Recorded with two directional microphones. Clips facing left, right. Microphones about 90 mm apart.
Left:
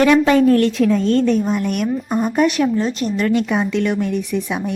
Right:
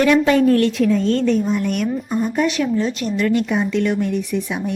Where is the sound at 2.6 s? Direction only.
35° left (ahead or behind).